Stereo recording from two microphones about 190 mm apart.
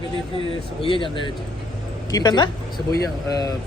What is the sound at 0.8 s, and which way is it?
Speech, 25° left (ahead or behind).